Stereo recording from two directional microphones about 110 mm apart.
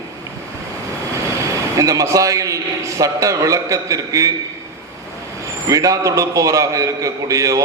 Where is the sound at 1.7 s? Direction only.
30° right (ahead or behind).